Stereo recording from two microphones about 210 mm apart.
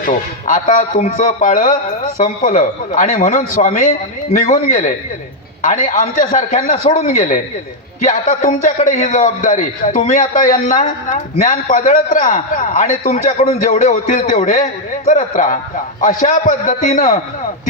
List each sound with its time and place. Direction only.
0.0 s a man's voice: 40° left (ahead or behind)